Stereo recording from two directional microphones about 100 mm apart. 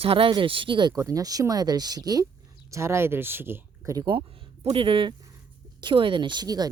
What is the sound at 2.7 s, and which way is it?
Speech, 30° right (ahead or behind).